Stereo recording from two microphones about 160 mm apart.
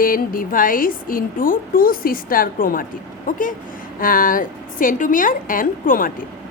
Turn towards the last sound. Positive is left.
turn(degrees=60)  # may be behind; listen again after turning